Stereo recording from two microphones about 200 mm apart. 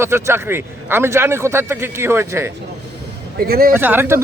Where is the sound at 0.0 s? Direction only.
10° right (ahead or behind).